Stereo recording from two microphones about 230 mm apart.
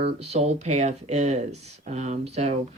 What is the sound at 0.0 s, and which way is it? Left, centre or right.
Speech, right.